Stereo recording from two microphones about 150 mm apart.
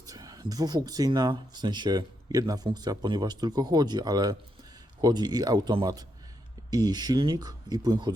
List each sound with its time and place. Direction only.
0.1 s speech: 25° right (ahead or behind)